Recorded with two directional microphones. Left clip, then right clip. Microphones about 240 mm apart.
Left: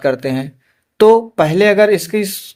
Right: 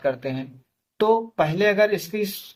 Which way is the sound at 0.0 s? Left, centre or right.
Left.